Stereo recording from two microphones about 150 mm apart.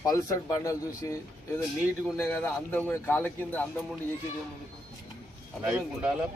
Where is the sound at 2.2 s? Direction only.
15° left (ahead or behind).